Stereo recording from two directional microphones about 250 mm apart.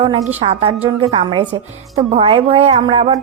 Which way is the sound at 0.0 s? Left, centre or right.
Right.